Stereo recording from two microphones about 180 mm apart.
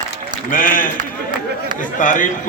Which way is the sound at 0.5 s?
50° left (ahead or behind).